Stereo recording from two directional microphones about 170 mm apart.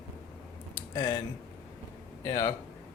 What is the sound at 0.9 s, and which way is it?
Speech, 20° left (ahead or behind).